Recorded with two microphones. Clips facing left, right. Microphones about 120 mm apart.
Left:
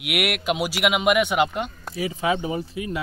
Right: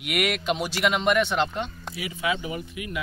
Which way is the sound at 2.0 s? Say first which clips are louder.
Left 5 dB; 35° left (ahead or behind).